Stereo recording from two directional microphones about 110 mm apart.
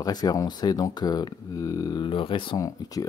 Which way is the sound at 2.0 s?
50° left (ahead or behind).